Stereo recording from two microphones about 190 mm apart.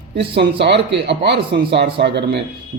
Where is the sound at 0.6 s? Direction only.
65° right (ahead or behind).